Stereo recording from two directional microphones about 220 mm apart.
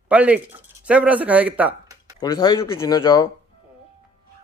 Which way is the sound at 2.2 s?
20° left (ahead or behind).